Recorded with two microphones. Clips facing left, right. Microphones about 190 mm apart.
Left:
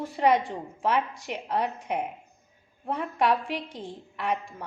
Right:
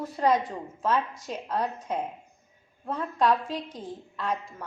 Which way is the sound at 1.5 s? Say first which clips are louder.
Left 1 dB; 15° left (ahead or behind).